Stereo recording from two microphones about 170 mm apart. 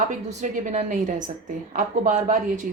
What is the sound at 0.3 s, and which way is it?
A woman's voice, 45° right (ahead or behind).